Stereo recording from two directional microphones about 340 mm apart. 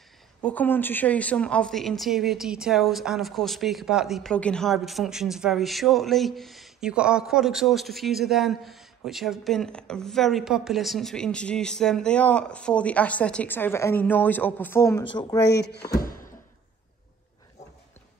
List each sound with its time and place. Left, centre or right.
0.4 s speech: centre
15.4 s speech: left